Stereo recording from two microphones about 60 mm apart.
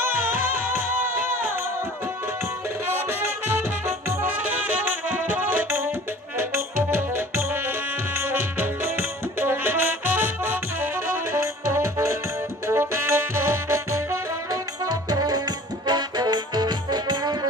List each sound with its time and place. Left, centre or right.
2.9 s music: right
14.5 s music: right